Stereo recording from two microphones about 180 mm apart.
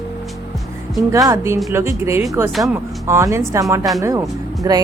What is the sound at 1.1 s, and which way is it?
Speech, 15° right (ahead or behind).